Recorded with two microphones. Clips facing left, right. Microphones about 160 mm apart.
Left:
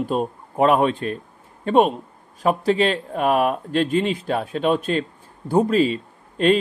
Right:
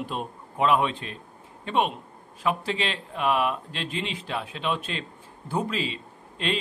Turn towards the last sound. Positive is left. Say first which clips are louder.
# left 12 dB
turn(degrees=45)  # may be behind; listen again after turning